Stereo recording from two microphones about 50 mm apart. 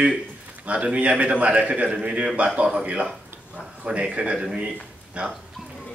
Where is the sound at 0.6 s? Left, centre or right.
Right.